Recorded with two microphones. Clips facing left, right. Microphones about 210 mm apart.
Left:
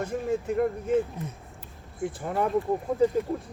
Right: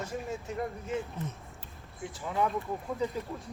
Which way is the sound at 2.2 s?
50° left (ahead or behind).